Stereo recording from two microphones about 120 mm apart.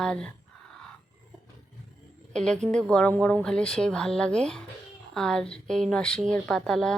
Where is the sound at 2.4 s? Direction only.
5° left (ahead or behind).